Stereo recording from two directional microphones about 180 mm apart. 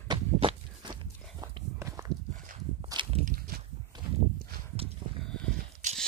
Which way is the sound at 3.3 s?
55° right (ahead or behind).